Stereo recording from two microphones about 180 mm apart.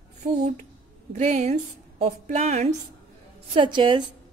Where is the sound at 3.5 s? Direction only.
25° right (ahead or behind).